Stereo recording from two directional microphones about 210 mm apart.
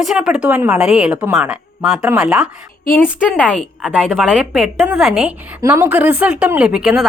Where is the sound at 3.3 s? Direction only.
5° left (ahead or behind).